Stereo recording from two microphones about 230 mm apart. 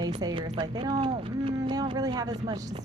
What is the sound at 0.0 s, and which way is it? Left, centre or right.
Speech, centre.